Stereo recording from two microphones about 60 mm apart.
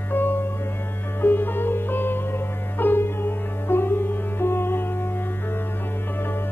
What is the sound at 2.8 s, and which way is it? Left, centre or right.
Sitar, left.